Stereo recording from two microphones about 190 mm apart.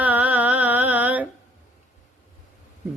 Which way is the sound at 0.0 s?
10° right (ahead or behind).